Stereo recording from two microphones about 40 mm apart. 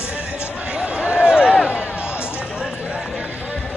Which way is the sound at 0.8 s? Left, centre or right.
Centre.